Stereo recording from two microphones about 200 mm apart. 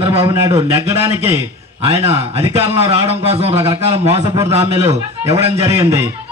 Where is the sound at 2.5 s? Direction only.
30° right (ahead or behind).